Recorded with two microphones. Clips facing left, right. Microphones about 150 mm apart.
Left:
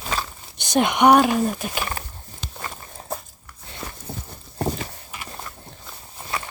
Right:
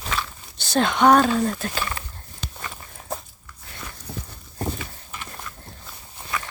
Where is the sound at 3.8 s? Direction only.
30° left (ahead or behind).